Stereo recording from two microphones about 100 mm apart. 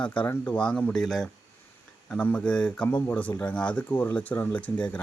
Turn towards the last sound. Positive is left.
turn(degrees=15)  # may be behind; listen again after turning